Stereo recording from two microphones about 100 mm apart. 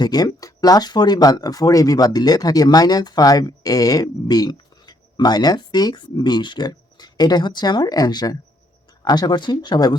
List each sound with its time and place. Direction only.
0.0 s speech: 40° left (ahead or behind)